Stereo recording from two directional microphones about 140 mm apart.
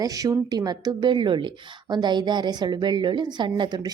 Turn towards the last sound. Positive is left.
turn(degrees=-30)  # may be behind; listen again after turning